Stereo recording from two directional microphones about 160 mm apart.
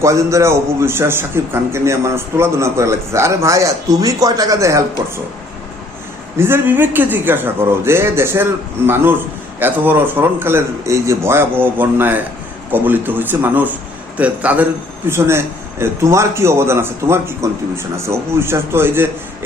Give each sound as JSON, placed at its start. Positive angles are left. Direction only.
{"t": 0.0, "sound": "a man's voice", "side_deg": -20}
{"t": 6.3, "sound": "a man's voice", "side_deg": -15}
{"t": 9.6, "sound": "a man's voice", "side_deg": -10}